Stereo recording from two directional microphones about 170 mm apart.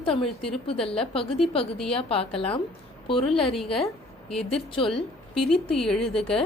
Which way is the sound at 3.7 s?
Centre (ahead or behind).